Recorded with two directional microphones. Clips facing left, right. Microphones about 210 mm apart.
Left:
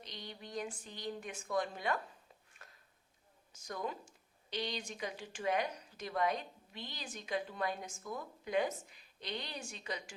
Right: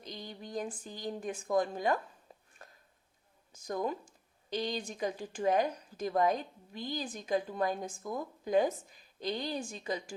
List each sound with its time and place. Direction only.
0.0 s speech: 45° right (ahead or behind)
3.7 s speech: 40° right (ahead or behind)